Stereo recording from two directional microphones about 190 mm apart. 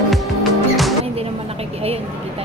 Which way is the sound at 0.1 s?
Centre (ahead or behind).